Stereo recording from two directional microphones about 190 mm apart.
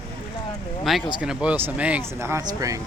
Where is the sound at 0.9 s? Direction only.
Centre (ahead or behind); by 2.8 s 15° right (ahead or behind).